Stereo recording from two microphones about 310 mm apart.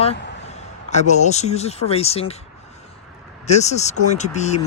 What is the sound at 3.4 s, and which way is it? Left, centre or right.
Speech, left.